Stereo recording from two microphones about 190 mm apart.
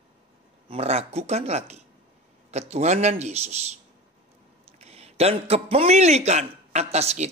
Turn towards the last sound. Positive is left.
turn(degrees=-35)  # may be behind; listen again after turning